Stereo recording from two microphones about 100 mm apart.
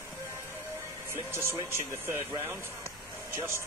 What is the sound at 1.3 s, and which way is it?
Speech, 25° right (ahead or behind).